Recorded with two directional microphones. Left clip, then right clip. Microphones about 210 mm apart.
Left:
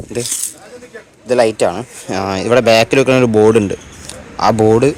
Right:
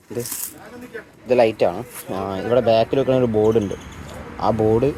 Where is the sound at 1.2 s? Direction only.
30° left (ahead or behind).